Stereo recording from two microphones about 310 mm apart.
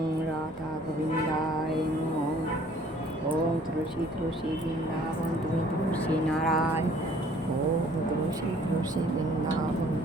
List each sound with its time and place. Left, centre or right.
6.4 s speech: centre